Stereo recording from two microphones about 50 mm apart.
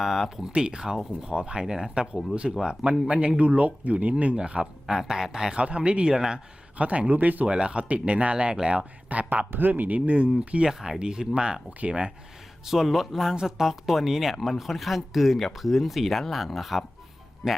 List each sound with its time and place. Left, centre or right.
0.0 s a man's voice: centre
6.7 s speech: right
7.4 s a man's voice: centre
9.0 s speech: right
10.7 s a man's voice: centre
12.6 s a man's voice: centre
17.4 s speech: centre